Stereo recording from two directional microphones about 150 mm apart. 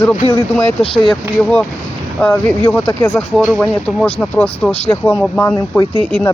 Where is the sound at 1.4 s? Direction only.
5° left (ahead or behind).